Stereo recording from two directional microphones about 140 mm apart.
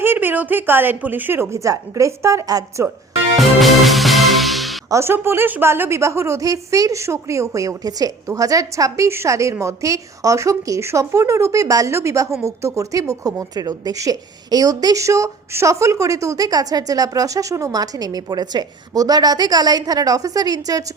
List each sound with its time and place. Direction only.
0.0 s speech: 15° right (ahead or behind)
3.3 s music: centre (ahead or behind)
4.9 s a woman's voice: 20° right (ahead or behind)